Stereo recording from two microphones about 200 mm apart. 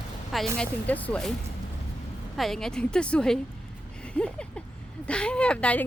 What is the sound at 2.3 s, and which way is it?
Speech, centre (ahead or behind).